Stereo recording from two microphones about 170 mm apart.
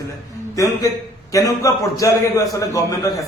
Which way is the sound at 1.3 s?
20° left (ahead or behind).